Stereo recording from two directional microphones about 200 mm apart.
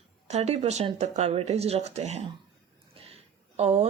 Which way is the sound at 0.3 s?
35° right (ahead or behind).